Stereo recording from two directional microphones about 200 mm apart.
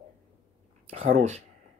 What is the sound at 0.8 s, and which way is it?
Speech, 35° right (ahead or behind).